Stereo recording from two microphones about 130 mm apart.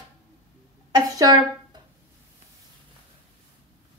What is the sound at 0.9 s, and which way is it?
Speech, 30° right (ahead or behind).